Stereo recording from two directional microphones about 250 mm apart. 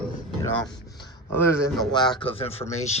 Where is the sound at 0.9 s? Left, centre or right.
Centre.